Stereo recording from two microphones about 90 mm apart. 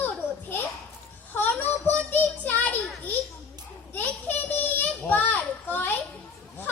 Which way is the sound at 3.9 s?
20° left (ahead or behind).